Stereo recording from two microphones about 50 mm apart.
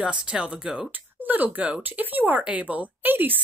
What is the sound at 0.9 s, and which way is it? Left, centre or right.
Speech, right.